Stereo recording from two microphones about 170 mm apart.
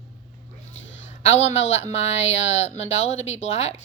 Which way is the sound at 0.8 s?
90° left.